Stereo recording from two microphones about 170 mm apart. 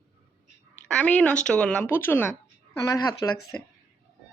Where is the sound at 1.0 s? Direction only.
5° left (ahead or behind).